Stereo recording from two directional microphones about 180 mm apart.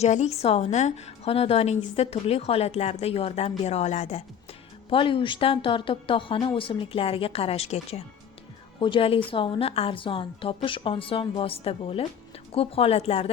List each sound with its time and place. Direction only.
0.0 s a woman's voice: 40° left (ahead or behind)
4.9 s a woman's voice: 30° left (ahead or behind)